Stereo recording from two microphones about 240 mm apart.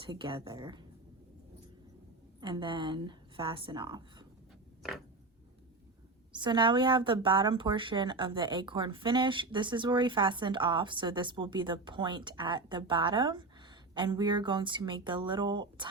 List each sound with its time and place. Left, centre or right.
0.0 s speech: right
2.4 s a woman's voice: centre
4.8 s a sound: centre
6.3 s speech: centre